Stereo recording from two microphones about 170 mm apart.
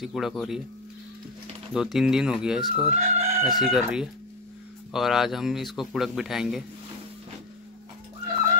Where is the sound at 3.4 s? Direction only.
Centre (ahead or behind).